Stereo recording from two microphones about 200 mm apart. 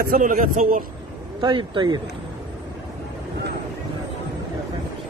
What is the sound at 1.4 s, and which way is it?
Speech, 25° right (ahead or behind).